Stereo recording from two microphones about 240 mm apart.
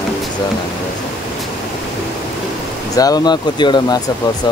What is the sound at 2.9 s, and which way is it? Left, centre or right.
Speech, centre.